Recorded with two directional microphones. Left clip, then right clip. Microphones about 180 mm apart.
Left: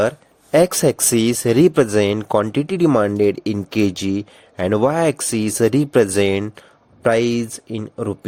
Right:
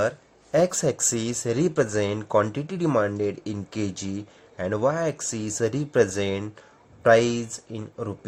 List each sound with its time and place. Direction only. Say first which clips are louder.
0.5 s speech: left 7 dB; 45° left (ahead or behind)